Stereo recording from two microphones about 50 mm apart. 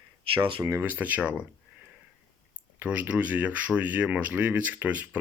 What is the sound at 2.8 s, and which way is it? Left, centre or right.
Speech, right.